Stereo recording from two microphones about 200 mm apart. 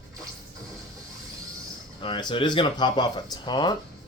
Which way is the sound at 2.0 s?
25° left (ahead or behind).